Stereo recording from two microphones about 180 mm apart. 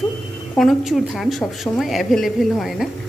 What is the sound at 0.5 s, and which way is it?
A woman's voice, centre (ahead or behind).